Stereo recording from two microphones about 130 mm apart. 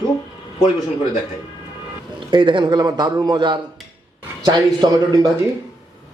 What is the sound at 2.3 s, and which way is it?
Speech, 40° right (ahead or behind).